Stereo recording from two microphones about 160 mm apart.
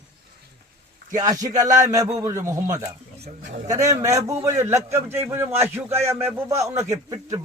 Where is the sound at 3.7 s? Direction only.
20° right (ahead or behind).